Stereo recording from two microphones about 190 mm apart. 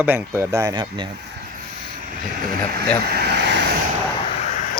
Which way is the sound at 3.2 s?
65° right (ahead or behind).